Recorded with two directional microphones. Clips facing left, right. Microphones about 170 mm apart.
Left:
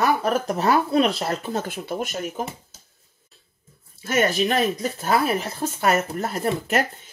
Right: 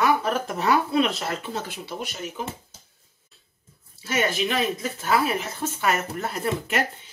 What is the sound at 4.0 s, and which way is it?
Speech, 50° left (ahead or behind).